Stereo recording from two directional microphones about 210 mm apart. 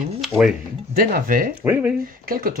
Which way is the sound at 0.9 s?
45° right (ahead or behind).